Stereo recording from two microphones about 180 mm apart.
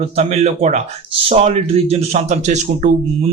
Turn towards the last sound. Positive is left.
turn(degrees=-40)  # may be behind; listen again after turning